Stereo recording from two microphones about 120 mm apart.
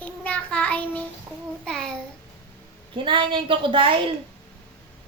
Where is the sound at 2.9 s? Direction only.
45° right (ahead or behind).